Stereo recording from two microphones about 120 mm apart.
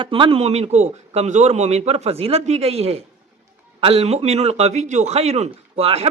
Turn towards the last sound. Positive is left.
turn(degrees=-55)  # may be behind; listen again after turning